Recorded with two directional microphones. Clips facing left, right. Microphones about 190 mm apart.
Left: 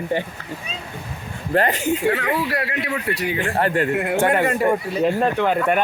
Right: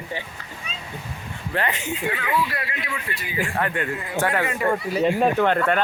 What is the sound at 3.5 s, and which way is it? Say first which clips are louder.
Speech: left 6 dB; 35° left (ahead or behind).